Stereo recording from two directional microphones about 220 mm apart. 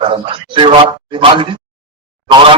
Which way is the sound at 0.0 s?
20° right (ahead or behind).